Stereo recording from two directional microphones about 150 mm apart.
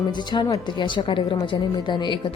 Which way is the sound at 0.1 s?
30° left (ahead or behind).